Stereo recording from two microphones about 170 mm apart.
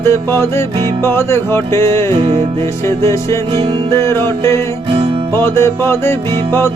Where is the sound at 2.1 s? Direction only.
35° right (ahead or behind).